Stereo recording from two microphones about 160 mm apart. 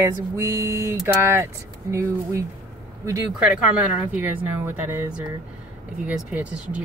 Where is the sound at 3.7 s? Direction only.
10° right (ahead or behind).